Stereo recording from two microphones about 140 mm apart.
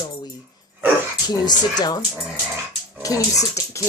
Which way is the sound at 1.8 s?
30° left (ahead or behind).